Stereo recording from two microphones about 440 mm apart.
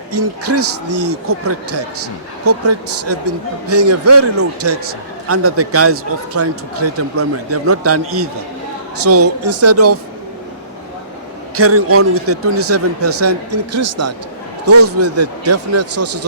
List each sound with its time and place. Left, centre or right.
0.1 s speech: right
11.5 s speech: right